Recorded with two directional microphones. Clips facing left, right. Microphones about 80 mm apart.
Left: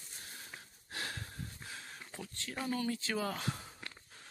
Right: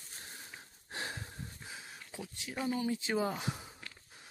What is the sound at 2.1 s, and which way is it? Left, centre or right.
Speech, centre.